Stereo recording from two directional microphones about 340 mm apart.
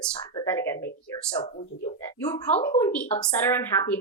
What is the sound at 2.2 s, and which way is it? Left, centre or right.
Speech, centre.